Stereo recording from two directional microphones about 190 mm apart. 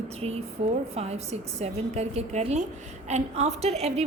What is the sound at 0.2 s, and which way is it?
A woman's voice, 35° right (ahead or behind).